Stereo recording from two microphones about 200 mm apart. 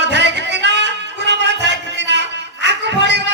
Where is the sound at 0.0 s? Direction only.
60° right (ahead or behind).